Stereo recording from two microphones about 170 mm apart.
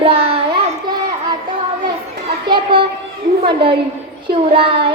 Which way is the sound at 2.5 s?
30° right (ahead or behind).